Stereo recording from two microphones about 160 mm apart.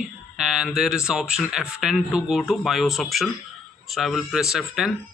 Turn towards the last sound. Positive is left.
turn(degrees=0)  # may be behind; listen again after turning